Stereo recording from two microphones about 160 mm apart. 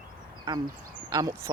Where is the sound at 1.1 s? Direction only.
20° right (ahead or behind).